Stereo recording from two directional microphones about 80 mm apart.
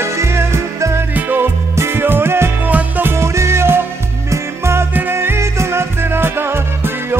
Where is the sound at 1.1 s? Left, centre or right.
Right.